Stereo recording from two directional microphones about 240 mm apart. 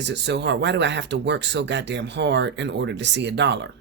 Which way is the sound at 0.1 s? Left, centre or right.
Right.